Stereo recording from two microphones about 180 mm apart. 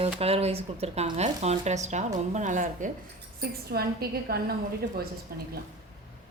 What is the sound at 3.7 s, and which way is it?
A woman's voice, 60° right (ahead or behind).